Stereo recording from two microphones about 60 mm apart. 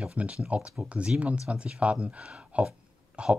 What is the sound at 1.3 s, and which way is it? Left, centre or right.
Speech, centre.